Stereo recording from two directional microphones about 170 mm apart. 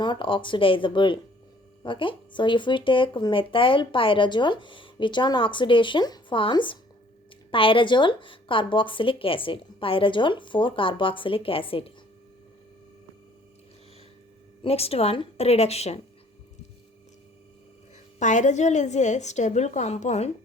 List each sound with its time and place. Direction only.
0.0 s a woman's voice: 30° left (ahead or behind)
14.6 s a woman's voice: 35° left (ahead or behind)
18.2 s a woman's voice: 45° left (ahead or behind)